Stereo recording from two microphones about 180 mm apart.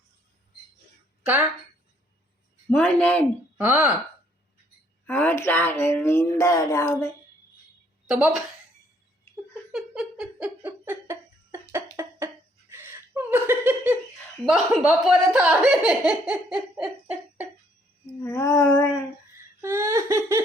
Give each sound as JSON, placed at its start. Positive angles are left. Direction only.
{"t": 2.6, "sound": "speech", "side_deg": 10}
{"t": 3.6, "sound": "laughter", "side_deg": -10}
{"t": 5.0, "sound": "speech", "side_deg": 10}
{"t": 8.0, "sound": "a woman's voice", "side_deg": -5}
{"t": 9.7, "sound": "music", "side_deg": -5}
{"t": 11.7, "sound": "a sound", "side_deg": -15}
{"t": 14.4, "sound": "speech", "side_deg": -5}
{"t": 18.2, "sound": "speech", "side_deg": 15}
{"t": 19.6, "sound": "laughter", "side_deg": -15}